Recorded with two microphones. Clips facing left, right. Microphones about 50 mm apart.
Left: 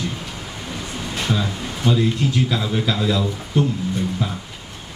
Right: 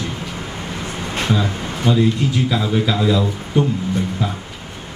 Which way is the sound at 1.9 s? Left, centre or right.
Centre.